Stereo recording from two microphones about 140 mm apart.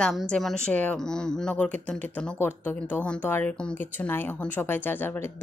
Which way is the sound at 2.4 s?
10° left (ahead or behind).